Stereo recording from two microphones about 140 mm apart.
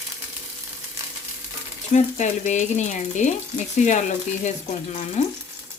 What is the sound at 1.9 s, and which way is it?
Speech, 60° left (ahead or behind).